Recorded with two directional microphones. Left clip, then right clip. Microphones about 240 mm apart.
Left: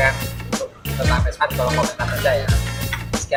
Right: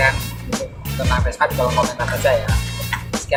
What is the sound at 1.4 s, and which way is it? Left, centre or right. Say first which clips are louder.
Speech: right 2 dB; centre.